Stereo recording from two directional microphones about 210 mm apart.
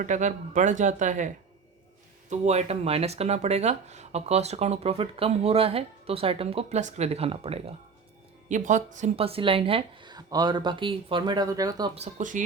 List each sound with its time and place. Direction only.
0.0 s speech: 35° right (ahead or behind)
2.3 s speech: 35° right (ahead or behind); by 11.9 s 20° right (ahead or behind)
11.9 s speech: 35° right (ahead or behind)